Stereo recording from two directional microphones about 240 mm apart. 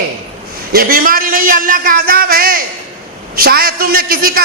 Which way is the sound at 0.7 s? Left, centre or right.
Right.